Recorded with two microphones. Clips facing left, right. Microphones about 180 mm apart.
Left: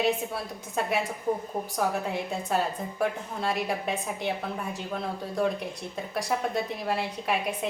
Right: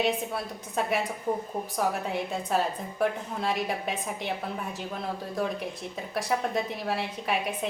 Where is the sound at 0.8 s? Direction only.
Centre (ahead or behind).